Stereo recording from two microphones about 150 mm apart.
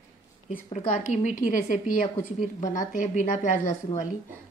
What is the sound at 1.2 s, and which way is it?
A woman's voice, 60° left (ahead or behind).